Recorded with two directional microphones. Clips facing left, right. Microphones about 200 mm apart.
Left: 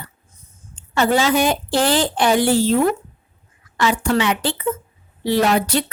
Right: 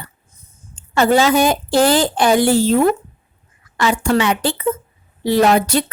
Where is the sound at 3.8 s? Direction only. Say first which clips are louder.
Right 2 dB; 45° right (ahead or behind).